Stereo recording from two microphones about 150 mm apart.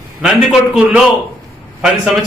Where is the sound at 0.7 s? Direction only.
5° right (ahead or behind).